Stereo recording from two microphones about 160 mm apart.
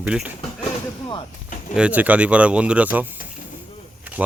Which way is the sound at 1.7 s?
10° right (ahead or behind).